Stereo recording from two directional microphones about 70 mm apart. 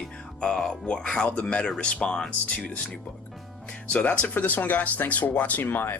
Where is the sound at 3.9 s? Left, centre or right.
Left.